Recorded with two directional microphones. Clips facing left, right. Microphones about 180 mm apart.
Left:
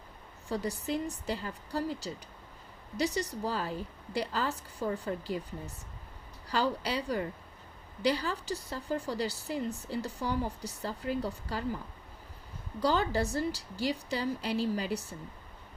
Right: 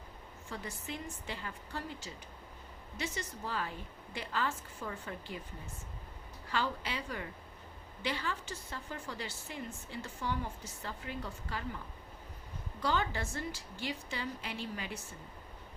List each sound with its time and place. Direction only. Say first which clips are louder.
0.4 s speech: left 10 dB; 35° left (ahead or behind)
12.8 s speech: left 6 dB; 35° left (ahead or behind)